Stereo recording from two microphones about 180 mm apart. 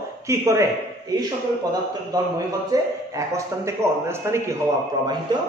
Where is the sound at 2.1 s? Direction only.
20° right (ahead or behind).